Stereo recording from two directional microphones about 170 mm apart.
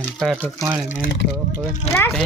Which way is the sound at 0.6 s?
10° right (ahead or behind).